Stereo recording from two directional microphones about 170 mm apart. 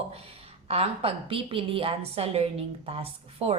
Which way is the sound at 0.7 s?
35° right (ahead or behind).